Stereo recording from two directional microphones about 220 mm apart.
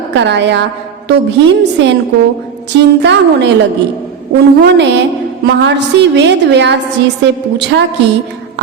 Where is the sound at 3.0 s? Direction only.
50° right (ahead or behind).